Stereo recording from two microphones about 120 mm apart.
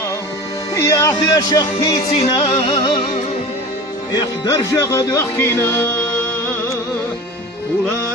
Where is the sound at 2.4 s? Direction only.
45° left (ahead or behind).